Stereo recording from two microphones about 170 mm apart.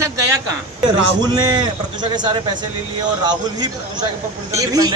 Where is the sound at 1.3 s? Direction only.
25° right (ahead or behind).